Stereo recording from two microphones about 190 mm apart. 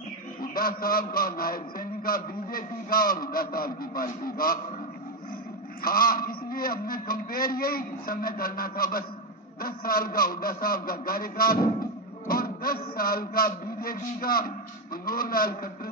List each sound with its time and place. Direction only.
0.4 s a man's voice: 50° left (ahead or behind)
5.8 s a man's voice: 50° left (ahead or behind)